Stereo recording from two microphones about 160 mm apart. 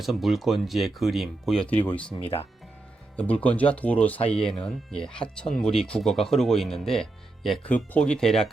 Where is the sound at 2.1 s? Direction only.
35° left (ahead or behind).